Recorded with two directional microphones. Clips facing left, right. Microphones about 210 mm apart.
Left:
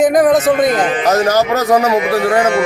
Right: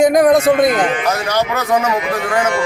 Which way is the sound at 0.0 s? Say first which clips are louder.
Even; 5° left (ahead or behind).